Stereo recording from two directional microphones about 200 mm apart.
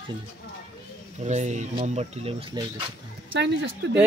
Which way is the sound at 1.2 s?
35° right (ahead or behind).